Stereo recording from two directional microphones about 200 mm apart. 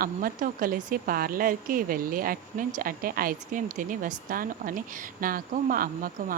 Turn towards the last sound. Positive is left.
turn(degrees=-45)  # may be behind; listen again after turning